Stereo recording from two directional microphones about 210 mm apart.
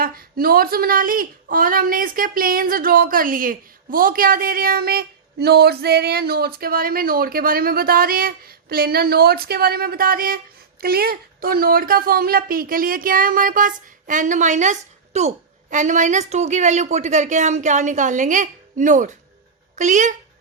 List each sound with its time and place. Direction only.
0.0 s a woman's voice: 45° right (ahead or behind)